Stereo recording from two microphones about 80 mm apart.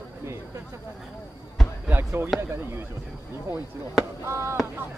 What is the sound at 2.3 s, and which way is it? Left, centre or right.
Speech, right.